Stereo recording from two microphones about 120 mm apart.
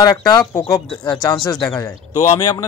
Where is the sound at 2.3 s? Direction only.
35° left (ahead or behind).